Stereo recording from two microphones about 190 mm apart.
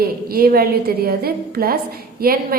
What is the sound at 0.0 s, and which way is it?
A woman's voice, 50° right (ahead or behind).